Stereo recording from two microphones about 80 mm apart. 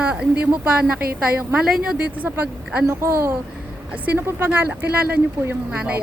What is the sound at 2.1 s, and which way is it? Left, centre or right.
A woman's voice, right.